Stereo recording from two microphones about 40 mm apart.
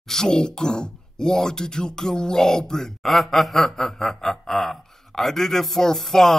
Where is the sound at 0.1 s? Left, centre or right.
Centre.